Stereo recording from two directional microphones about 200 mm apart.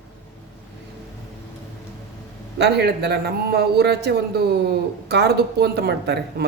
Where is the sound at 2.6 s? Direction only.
55° right (ahead or behind).